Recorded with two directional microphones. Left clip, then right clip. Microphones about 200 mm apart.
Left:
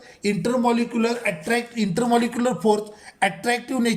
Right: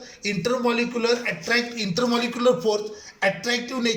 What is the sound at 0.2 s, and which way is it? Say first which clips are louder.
Speech: left 2 dB; 40° left (ahead or behind).